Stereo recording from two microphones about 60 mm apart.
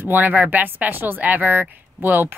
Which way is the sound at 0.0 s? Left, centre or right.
Right.